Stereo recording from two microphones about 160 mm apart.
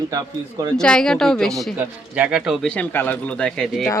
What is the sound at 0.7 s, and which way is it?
Speech, 5° left (ahead or behind).